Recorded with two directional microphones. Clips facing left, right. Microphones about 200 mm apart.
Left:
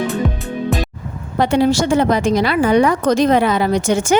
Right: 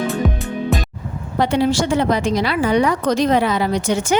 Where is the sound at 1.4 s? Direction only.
50° left (ahead or behind).